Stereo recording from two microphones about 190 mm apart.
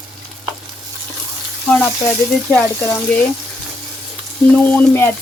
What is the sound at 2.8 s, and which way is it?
Speech, 10° left (ahead or behind).